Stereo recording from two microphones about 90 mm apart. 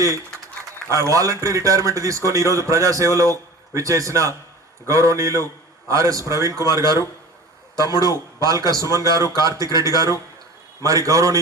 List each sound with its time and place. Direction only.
0.9 s a man's voice: 35° right (ahead or behind)
8.4 s a man's voice: 40° right (ahead or behind)